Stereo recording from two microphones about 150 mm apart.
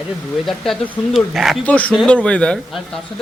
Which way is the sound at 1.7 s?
10° left (ahead or behind).